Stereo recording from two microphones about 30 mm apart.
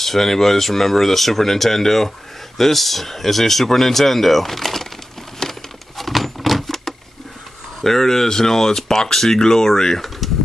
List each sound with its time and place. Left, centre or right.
0.0 s speech: centre
5.5 s a sound: centre
7.8 s speech: centre